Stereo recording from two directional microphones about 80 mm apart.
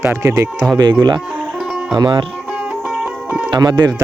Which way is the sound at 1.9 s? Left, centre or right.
Right.